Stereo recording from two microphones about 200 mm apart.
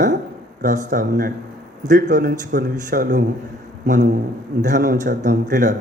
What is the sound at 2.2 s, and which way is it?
A man's voice, 55° right (ahead or behind).